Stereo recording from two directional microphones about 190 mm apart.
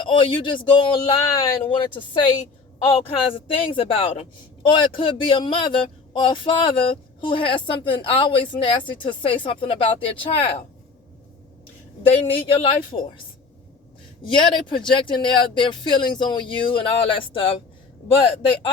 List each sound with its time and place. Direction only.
0.0 s speech: 25° left (ahead or behind)
12.1 s speech: 30° left (ahead or behind)
14.2 s speech: 25° left (ahead or behind)